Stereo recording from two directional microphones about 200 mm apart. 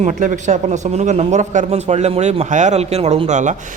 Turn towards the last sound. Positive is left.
turn(degrees=-35)  # may be behind; listen again after turning